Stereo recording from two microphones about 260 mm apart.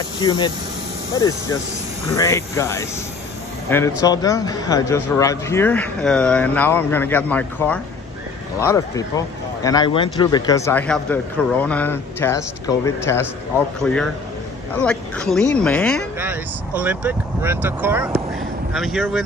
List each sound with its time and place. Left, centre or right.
0.2 s speech: centre
2.1 s speech: centre
4.0 s speech: centre
16.2 s speech: centre